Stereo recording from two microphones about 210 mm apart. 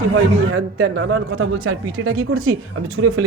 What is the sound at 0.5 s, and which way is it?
A man's voice, 65° right (ahead or behind).